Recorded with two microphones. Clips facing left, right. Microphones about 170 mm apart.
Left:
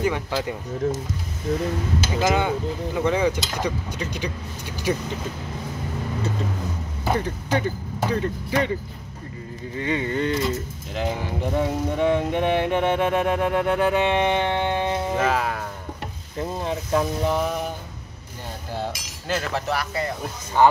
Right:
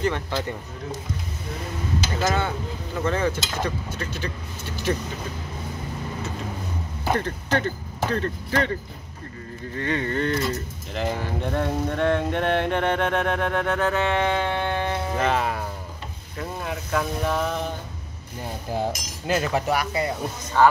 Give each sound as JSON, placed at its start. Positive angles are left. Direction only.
{"t": 0.0, "sound": "music", "side_deg": 10}
{"t": 2.1, "sound": "music", "side_deg": 15}
{"t": 7.1, "sound": "music", "side_deg": 10}
{"t": 9.8, "sound": "music", "side_deg": 15}
{"t": 10.9, "sound": "speech", "side_deg": 0}
{"t": 11.1, "sound": "music", "side_deg": 10}
{"t": 15.1, "sound": "speech", "side_deg": 0}
{"t": 16.3, "sound": "speech", "side_deg": 25}
{"t": 19.2, "sound": "speech", "side_deg": -15}
{"t": 20.6, "sound": "music", "side_deg": 15}